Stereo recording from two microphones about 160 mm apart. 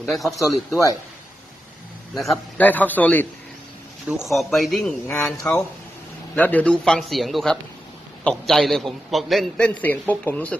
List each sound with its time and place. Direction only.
0.0 s a man's voice: centre (ahead or behind)
2.1 s a man's voice: centre (ahead or behind)
4.1 s a man's voice: centre (ahead or behind)
5.0 s a man's voice: 15° left (ahead or behind)